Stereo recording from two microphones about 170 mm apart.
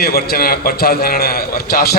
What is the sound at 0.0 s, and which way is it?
A man's voice, 65° left (ahead or behind).